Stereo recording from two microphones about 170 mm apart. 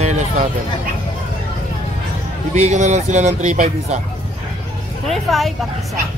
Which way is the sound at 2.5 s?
40° right (ahead or behind).